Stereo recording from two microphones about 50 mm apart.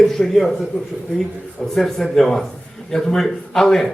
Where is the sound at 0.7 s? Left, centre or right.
Left.